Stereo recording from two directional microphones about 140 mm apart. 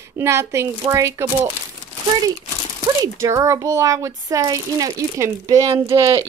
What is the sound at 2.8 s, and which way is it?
Speech, 20° right (ahead or behind).